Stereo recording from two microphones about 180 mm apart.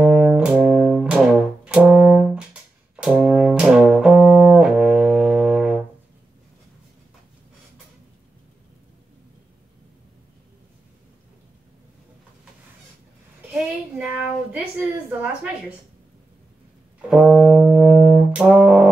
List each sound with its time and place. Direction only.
0.0 s brass instrument: 5° right (ahead or behind)
13.5 s a sound: 5° right (ahead or behind)
17.1 s brass instrument: 5° right (ahead or behind)